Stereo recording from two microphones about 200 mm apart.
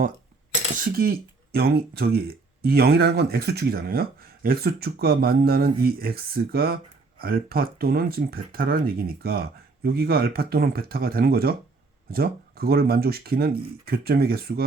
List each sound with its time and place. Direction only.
0.8 s speech: 45° right (ahead or behind)